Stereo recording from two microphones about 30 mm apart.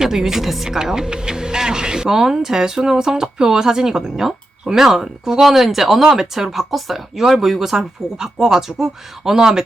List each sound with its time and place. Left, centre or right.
0.0 s speech: centre
0.8 s speech: right